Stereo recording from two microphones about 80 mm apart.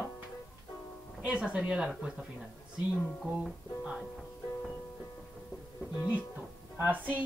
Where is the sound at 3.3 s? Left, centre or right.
Centre.